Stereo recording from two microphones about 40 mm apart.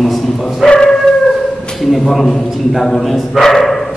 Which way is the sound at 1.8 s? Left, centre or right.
Centre.